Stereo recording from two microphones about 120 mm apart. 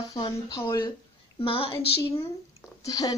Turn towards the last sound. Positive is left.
turn(degrees=35)  # may be behind; listen again after turning